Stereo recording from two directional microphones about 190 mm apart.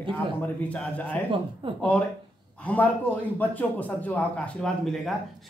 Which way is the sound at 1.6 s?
25° right (ahead or behind).